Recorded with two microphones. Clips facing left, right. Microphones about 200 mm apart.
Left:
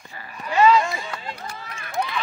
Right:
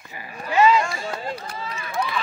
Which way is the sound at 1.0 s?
45° right (ahead or behind).